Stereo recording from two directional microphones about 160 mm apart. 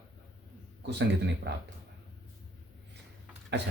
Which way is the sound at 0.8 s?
90° right.